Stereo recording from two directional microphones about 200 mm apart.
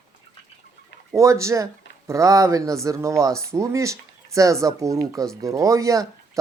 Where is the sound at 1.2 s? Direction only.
15° right (ahead or behind).